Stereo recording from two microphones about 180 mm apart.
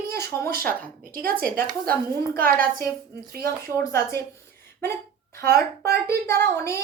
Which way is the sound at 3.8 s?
15° left (ahead or behind).